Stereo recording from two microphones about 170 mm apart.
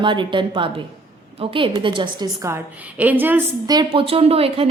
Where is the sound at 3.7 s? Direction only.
30° right (ahead or behind).